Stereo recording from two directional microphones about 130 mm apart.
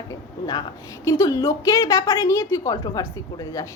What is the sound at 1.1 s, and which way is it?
A woman's voice, 25° left (ahead or behind).